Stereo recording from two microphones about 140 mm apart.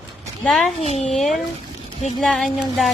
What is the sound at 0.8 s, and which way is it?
Speech, 50° left (ahead or behind).